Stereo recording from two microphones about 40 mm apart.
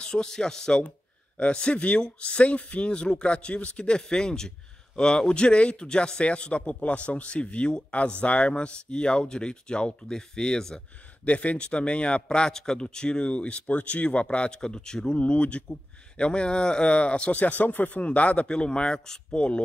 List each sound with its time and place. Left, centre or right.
0.0 s a man's voice: left
1.4 s a man's voice: left
11.2 s a man's voice: left
14.6 s a man's voice: centre
15.1 s a man's voice: left
18.5 s a man's voice: left